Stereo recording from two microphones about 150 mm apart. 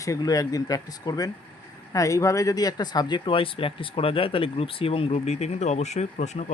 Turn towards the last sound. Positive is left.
turn(degrees=50)  # may be behind; listen again after turning